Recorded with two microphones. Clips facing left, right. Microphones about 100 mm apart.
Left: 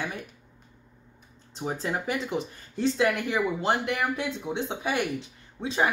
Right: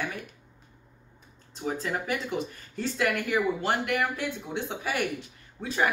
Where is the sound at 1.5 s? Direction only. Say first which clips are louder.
Left 1 dB; 25° left (ahead or behind).